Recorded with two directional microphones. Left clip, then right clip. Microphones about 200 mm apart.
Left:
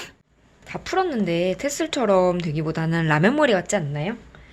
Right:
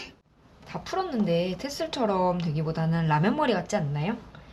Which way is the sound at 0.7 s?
50° left (ahead or behind).